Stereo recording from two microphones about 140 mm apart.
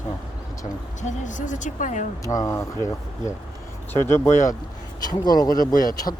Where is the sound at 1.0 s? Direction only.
60° left (ahead or behind).